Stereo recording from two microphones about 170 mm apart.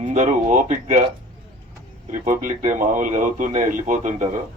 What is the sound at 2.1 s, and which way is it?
A man's voice, 50° right (ahead or behind).